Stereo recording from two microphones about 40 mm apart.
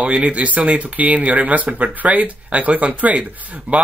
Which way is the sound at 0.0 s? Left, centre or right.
Right.